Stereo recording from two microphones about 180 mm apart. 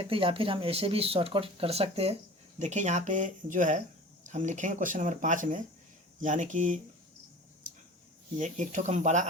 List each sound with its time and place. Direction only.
0.0 s speech: 30° right (ahead or behind)
8.4 s speech: 45° right (ahead or behind)